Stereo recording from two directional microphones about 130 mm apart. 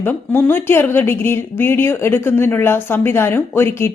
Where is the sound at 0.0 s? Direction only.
15° left (ahead or behind).